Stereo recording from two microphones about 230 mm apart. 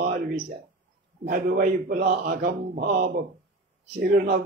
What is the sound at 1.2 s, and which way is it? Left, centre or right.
Speech, right.